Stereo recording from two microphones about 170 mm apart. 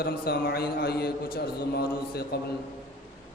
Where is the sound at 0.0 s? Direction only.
65° left (ahead or behind).